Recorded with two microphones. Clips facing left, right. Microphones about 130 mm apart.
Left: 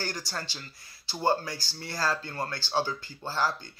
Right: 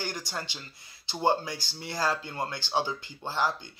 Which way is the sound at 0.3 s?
20° right (ahead or behind).